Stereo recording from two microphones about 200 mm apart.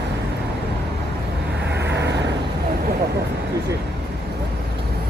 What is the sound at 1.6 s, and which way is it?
Vehicle, 60° right (ahead or behind).